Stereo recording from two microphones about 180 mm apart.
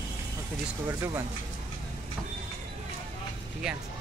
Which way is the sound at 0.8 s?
15° right (ahead or behind).